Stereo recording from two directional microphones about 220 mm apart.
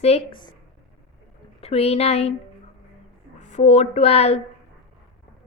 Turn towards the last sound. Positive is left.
turn(degrees=30)  # may be behind; listen again after turning